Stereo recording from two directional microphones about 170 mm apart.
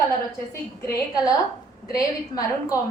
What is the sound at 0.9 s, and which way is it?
A woman's voice, 20° left (ahead or behind).